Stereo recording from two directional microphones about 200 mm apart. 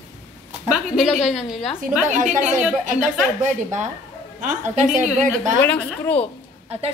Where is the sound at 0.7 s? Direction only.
Centre (ahead or behind).